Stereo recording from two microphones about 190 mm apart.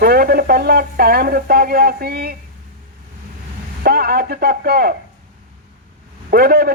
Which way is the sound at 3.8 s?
55° right (ahead or behind).